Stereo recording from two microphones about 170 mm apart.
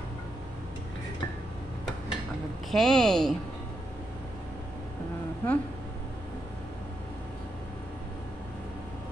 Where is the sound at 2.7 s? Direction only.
Centre (ahead or behind).